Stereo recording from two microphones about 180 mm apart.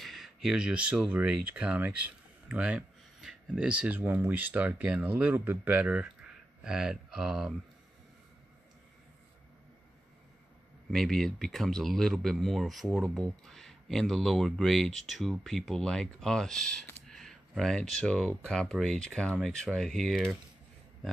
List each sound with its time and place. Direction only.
0.0 s speech: centre (ahead or behind)
10.9 s speech: centre (ahead or behind)